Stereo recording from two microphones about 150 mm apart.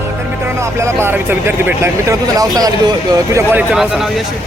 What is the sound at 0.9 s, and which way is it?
Speech, 15° right (ahead or behind).